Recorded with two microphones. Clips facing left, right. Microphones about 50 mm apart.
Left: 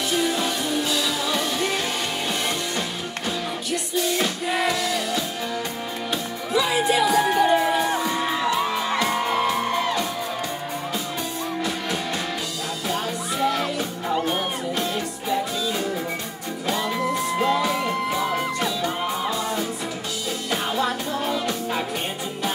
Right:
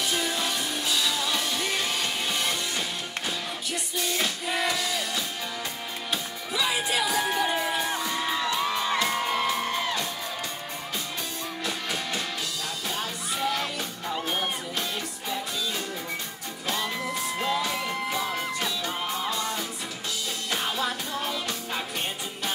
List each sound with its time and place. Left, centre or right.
0.1 s music: centre
3.9 s music: centre
6.5 s music: centre
12.8 s music: centre
16.6 s music: centre
20.7 s music: centre